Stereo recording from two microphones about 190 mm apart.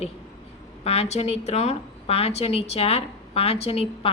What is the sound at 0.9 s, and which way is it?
A woman's voice, 35° left (ahead or behind).